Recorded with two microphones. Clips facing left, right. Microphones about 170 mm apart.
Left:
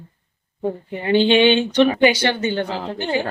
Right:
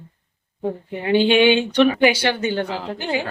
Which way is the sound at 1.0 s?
5° right (ahead or behind).